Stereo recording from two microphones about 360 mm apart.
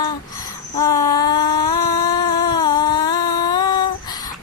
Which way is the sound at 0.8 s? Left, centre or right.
Centre.